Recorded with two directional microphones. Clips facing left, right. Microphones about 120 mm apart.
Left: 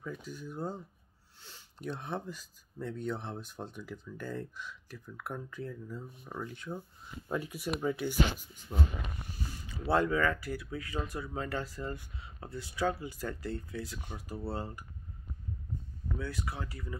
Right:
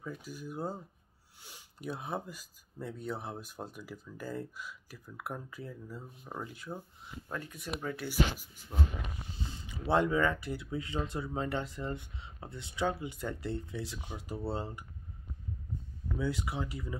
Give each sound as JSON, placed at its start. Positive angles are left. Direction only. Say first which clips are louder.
{"t": 0.0, "sound": "speech", "louder": "left 1 dB", "side_deg": -10}
{"t": 7.2, "sound": "speech", "louder": "left 5 dB", "side_deg": 10}
{"t": 9.3, "sound": "speech", "louder": "even", "side_deg": -25}
{"t": 16.2, "sound": "speech", "louder": "right 5 dB", "side_deg": -20}